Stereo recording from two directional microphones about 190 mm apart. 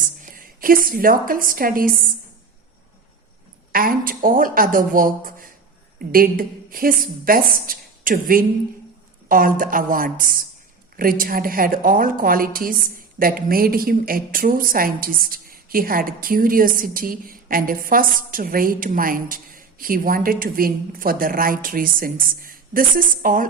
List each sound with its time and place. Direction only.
0.0 s a woman's voice: 45° right (ahead or behind)
3.7 s a sound: 50° right (ahead or behind)
4.2 s a woman's voice: 45° right (ahead or behind)